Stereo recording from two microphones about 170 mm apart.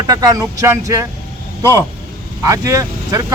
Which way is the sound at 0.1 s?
20° right (ahead or behind).